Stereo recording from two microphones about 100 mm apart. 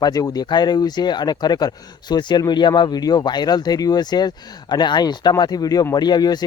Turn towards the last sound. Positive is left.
turn(degrees=45)  # may be behind; listen again after turning